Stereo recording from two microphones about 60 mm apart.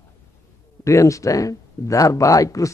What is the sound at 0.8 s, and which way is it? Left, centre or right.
Speech, left.